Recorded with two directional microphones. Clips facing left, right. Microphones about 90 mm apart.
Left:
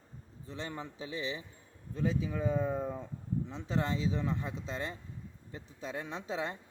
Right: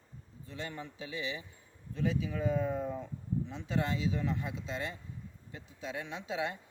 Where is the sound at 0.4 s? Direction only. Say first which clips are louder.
Left 1 dB; 30° left (ahead or behind).